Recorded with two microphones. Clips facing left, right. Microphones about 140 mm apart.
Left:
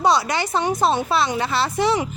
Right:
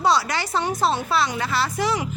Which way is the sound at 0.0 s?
20° left (ahead or behind).